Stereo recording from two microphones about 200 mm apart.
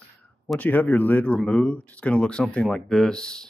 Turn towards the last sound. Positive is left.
turn(degrees=5)  # may be behind; listen again after turning